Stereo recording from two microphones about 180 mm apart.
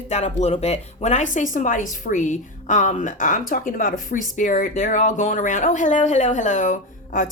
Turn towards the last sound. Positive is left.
turn(degrees=45)  # may be behind; listen again after turning